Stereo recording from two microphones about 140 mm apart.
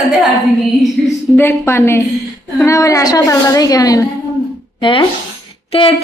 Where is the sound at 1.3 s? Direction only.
15° left (ahead or behind).